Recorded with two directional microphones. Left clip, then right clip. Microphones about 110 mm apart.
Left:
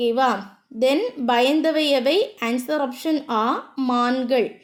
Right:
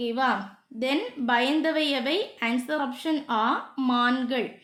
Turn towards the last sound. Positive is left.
turn(degrees=40)  # may be behind; listen again after turning